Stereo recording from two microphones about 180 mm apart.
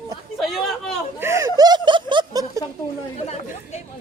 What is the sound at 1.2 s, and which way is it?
Speech, 15° right (ahead or behind).